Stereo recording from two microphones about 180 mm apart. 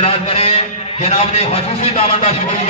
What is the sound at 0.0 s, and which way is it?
A man's voice, 35° left (ahead or behind).